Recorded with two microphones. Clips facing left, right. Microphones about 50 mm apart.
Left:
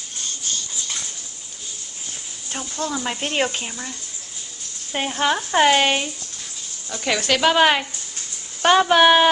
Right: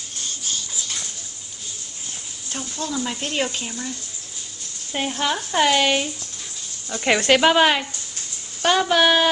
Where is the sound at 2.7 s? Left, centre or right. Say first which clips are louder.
Left 1 dB; centre.